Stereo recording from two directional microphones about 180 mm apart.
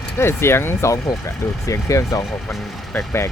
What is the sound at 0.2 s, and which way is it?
Speech, 15° left (ahead or behind).